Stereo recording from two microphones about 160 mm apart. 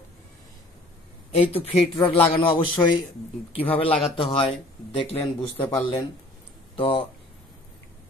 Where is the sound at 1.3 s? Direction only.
40° left (ahead or behind).